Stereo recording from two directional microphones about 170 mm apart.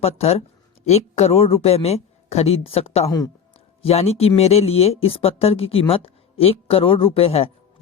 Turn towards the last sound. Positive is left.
turn(degrees=35)  # may be behind; listen again after turning